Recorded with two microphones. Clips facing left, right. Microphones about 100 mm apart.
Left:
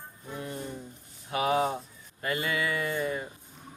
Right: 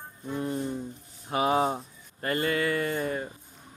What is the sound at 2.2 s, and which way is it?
Mantra, 45° right (ahead or behind).